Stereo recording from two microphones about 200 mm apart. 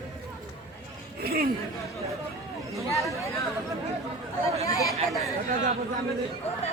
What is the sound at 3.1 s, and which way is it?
Chatter, 15° left (ahead or behind).